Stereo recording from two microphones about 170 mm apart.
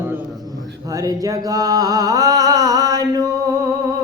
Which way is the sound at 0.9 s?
20° right (ahead or behind).